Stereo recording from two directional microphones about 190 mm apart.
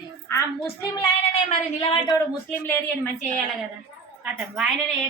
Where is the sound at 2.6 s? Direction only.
10° left (ahead or behind).